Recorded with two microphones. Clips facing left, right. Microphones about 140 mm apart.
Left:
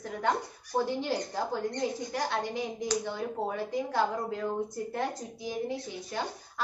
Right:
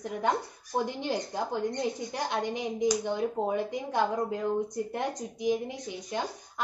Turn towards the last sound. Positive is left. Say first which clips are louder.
# right 1 dB
turn(degrees=-15)  # may be behind; listen again after turning